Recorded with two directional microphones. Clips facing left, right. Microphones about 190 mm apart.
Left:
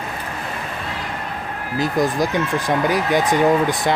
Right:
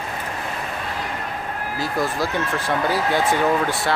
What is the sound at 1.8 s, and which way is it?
Speech, 15° left (ahead or behind).